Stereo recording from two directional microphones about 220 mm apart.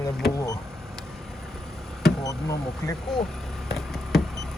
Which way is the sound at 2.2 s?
15° left (ahead or behind).